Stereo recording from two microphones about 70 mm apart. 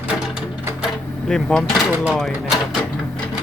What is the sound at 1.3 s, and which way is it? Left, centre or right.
Speech, centre.